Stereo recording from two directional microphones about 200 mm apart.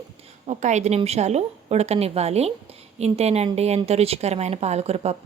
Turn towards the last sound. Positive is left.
turn(degrees=-30)  # may be behind; listen again after turning